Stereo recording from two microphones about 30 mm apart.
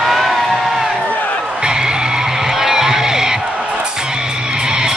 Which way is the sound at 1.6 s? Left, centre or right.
Right.